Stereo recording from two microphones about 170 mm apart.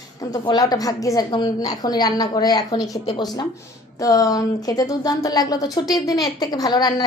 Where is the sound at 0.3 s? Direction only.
25° left (ahead or behind).